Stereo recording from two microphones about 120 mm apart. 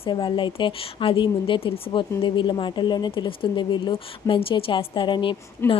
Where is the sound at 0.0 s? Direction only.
40° left (ahead or behind).